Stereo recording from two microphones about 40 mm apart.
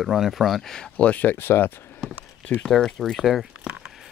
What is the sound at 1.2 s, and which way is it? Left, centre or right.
Speech, left.